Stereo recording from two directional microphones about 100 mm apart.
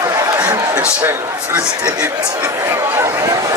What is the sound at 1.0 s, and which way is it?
A man's voice, 25° right (ahead or behind).